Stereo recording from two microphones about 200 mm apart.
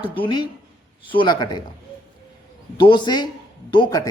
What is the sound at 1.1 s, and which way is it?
Speech, 25° left (ahead or behind).